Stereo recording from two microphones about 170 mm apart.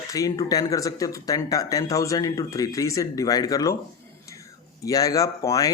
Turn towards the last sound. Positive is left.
turn(degrees=20)  # may be behind; listen again after turning